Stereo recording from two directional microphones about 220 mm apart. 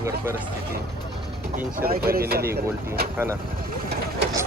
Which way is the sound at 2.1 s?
45° right (ahead or behind).